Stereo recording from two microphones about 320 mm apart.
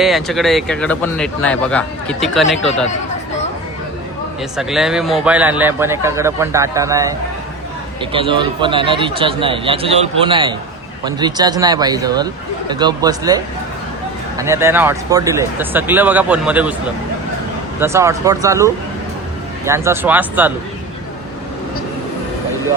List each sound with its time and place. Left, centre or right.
0.0 s speech: centre
4.5 s speech: centre
8.1 s speech: centre
17.7 s speech: centre